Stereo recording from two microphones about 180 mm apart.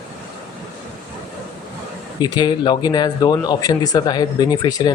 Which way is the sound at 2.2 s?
25° left (ahead or behind).